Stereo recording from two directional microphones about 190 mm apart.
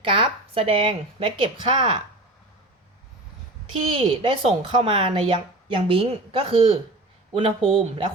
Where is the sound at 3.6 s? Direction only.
25° right (ahead or behind).